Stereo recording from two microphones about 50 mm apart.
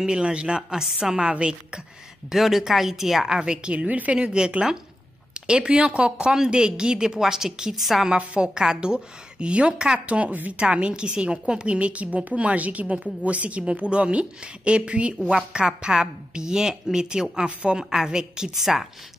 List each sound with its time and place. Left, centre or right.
0.0 s a woman's voice: centre
1.1 s a woman's voice: centre
2.3 s speech: centre
3.3 s a woman's voice: centre
8.1 s a woman's voice: centre
10.6 s a woman's voice: centre